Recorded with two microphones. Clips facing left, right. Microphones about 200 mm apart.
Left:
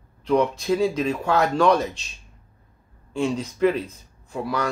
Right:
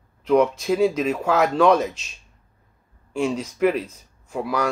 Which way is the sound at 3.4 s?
5° right (ahead or behind).